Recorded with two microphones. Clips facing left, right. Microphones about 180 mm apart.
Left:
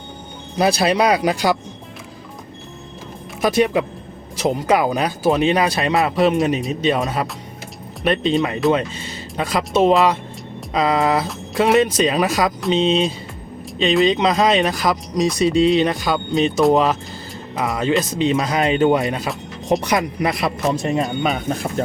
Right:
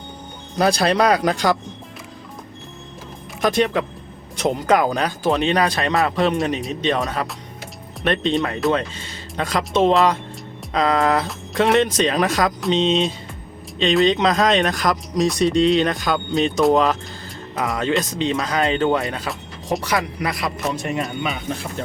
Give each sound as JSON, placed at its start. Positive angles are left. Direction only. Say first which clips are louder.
{"t": 0.5, "sound": "speech", "louder": "left 1 dB", "side_deg": 5}
{"t": 3.4, "sound": "speech", "louder": "left 2 dB", "side_deg": 10}
{"t": 21.2, "sound": "speech", "louder": "left 5 dB", "side_deg": 40}